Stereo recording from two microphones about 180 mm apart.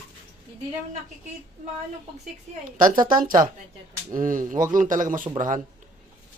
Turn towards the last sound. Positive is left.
turn(degrees=-45)  # may be behind; listen again after turning